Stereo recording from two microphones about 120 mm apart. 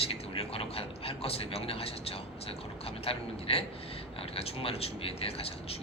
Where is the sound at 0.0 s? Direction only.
50° left (ahead or behind).